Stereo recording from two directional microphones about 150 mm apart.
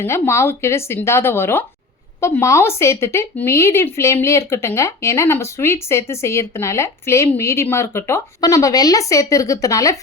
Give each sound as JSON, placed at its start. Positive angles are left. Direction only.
{"t": 0.0, "sound": "speech", "side_deg": 20}